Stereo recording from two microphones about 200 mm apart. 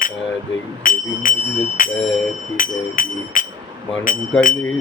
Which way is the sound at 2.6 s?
40° left (ahead or behind).